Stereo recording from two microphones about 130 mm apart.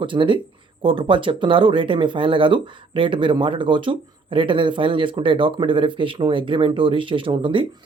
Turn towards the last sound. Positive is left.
turn(degrees=-40)  # may be behind; listen again after turning